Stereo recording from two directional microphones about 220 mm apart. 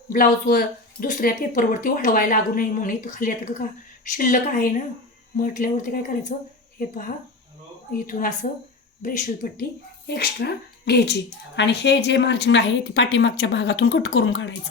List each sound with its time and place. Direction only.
0.1 s speech: 40° left (ahead or behind)